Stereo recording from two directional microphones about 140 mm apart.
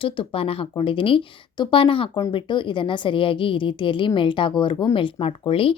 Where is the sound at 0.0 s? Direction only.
40° left (ahead or behind).